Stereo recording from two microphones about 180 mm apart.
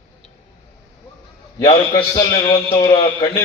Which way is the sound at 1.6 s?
20° left (ahead or behind).